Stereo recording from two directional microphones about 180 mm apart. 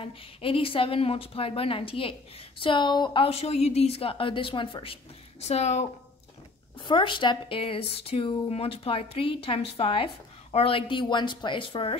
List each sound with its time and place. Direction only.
0.0 s speech: 30° left (ahead or behind)
6.9 s speech: 25° left (ahead or behind)